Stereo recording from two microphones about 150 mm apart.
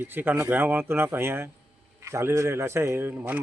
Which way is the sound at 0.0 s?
15° right (ahead or behind).